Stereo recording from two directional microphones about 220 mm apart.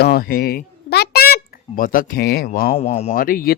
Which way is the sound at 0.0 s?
45° left (ahead or behind).